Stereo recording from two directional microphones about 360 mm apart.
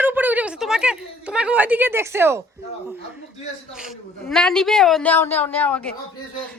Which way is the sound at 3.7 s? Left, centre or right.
Centre.